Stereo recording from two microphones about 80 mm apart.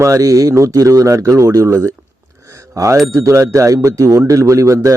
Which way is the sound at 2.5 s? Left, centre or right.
Right.